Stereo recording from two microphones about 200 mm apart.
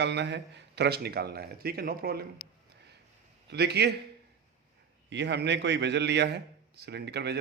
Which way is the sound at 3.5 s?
55° right (ahead or behind).